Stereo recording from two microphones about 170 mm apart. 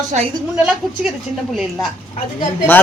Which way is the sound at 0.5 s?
5° right (ahead or behind).